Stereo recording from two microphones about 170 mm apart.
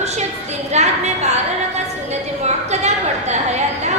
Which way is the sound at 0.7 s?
40° right (ahead or behind).